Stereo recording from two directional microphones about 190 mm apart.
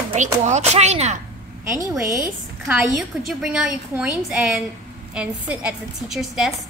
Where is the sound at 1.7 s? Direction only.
15° right (ahead or behind).